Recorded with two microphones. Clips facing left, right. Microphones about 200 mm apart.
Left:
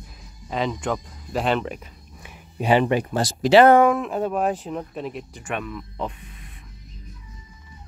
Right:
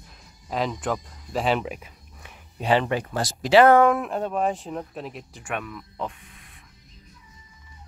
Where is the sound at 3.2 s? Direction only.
30° left (ahead or behind).